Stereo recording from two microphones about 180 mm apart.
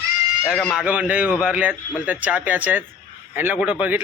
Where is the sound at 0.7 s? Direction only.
5° right (ahead or behind).